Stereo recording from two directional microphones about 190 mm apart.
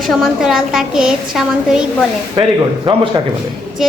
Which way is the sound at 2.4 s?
25° right (ahead or behind).